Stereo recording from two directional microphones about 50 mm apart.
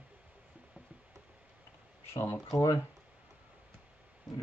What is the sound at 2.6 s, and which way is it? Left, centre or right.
Speech, left.